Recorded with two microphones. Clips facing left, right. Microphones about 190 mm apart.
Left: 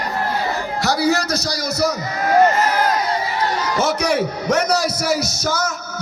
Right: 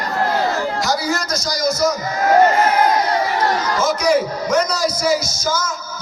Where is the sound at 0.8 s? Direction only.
65° left (ahead or behind).